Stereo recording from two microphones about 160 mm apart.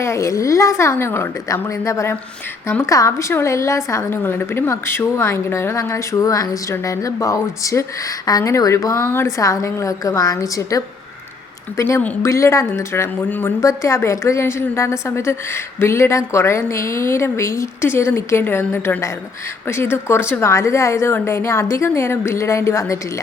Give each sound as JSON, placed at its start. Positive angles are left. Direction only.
{"t": 0.0, "sound": "a woman's voice", "side_deg": 20}